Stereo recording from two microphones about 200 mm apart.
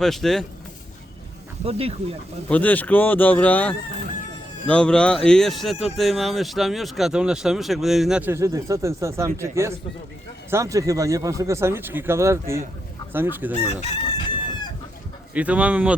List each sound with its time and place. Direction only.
0.0 s speech: centre (ahead or behind)
1.6 s speech: 30° right (ahead or behind)
2.5 s speech: 10° left (ahead or behind); by 12.6 s 15° right (ahead or behind)
13.7 s chicken: 30° left (ahead or behind)
15.4 s speech: 5° right (ahead or behind)